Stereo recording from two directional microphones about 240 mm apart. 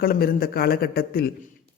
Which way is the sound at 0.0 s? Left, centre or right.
Left.